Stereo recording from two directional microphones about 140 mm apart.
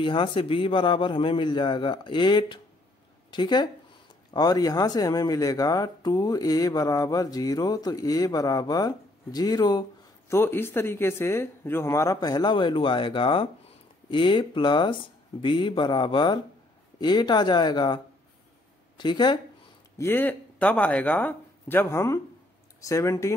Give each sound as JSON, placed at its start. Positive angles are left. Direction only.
{"t": 0.0, "sound": "a man's voice", "side_deg": 35}
{"t": 10.3, "sound": "a man's voice", "side_deg": 15}
{"t": 20.0, "sound": "speech", "side_deg": 15}